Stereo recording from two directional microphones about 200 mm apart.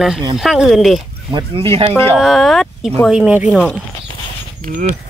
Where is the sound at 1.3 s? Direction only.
30° right (ahead or behind).